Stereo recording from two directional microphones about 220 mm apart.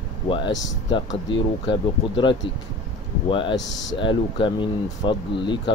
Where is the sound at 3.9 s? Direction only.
20° left (ahead or behind).